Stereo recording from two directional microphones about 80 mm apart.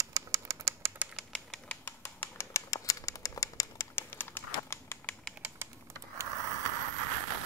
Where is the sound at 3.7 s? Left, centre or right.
Left.